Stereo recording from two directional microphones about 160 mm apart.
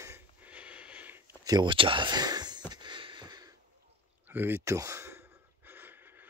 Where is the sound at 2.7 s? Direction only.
30° right (ahead or behind).